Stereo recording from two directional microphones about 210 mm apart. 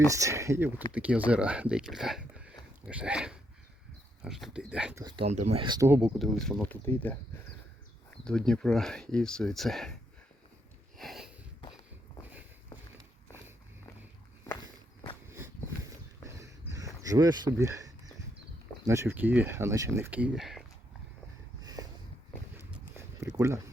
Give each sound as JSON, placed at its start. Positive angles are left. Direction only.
{"t": 0.2, "sound": "speech", "side_deg": -15}
{"t": 5.0, "sound": "speech", "side_deg": -25}
{"t": 5.9, "sound": "speech", "side_deg": 0}
{"t": 8.2, "sound": "speech", "side_deg": 5}
{"t": 10.9, "sound": "sniff", "side_deg": 0}
{"t": 16.2, "sound": "a sound", "side_deg": -15}
{"t": 18.9, "sound": "speech", "side_deg": -10}
{"t": 21.6, "sound": "a sound", "side_deg": -15}